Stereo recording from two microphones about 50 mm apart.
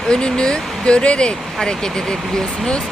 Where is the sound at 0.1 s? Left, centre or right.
Centre.